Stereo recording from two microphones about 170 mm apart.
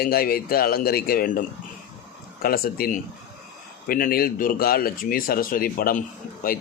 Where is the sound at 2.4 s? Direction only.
60° left (ahead or behind).